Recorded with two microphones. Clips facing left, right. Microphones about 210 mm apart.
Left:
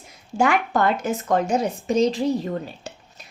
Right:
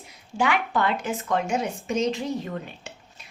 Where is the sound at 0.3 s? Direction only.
45° left (ahead or behind).